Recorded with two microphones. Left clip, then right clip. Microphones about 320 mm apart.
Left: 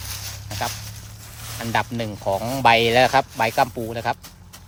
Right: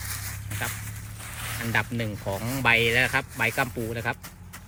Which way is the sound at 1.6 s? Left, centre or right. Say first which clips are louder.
Left 4 dB; centre.